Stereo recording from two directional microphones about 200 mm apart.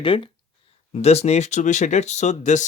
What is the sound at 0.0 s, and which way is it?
Speech, 25° left (ahead or behind).